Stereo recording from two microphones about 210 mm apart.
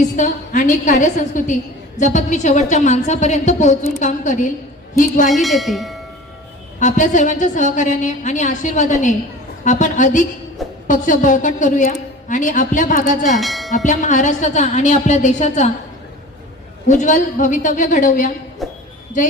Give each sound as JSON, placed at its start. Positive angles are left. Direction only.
{"t": 0.2, "sound": "a woman's voice", "side_deg": 40}
{"t": 5.3, "sound": "tubular bells", "side_deg": 0}
{"t": 6.7, "sound": "a woman's voice", "side_deg": 35}
{"t": 13.3, "sound": "tubular bells", "side_deg": 0}
{"t": 13.7, "sound": "a woman's voice", "side_deg": 35}
{"t": 16.9, "sound": "a woman's voice", "side_deg": 35}
{"t": 18.6, "sound": "tubular bells", "side_deg": 0}